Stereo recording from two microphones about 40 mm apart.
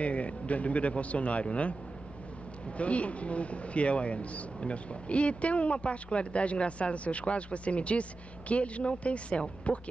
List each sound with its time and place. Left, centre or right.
0.0 s a man's voice: left
2.8 s a man's voice: left